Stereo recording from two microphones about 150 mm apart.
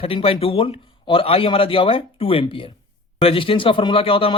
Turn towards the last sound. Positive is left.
turn(degrees=40)  # may be behind; listen again after turning